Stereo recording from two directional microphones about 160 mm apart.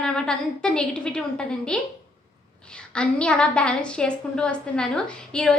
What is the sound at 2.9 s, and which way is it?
A woman's voice, 5° left (ahead or behind).